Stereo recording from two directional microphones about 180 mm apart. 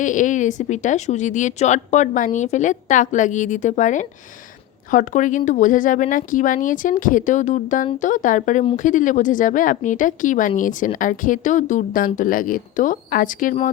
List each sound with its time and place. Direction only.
0.0 s speech: 45° left (ahead or behind)